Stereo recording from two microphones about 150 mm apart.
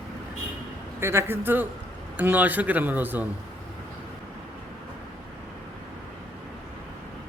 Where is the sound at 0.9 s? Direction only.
15° right (ahead or behind).